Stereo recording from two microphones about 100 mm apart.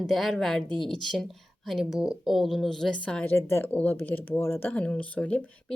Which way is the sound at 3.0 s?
15° left (ahead or behind).